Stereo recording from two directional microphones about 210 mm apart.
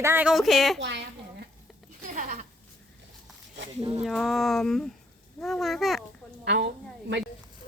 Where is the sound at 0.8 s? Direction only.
55° right (ahead or behind).